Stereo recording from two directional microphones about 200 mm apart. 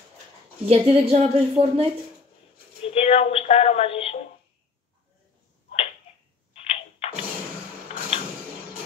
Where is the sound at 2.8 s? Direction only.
30° left (ahead or behind).